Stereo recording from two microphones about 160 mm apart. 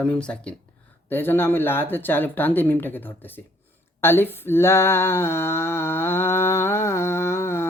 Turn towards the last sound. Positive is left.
turn(degrees=15)  # may be behind; listen again after turning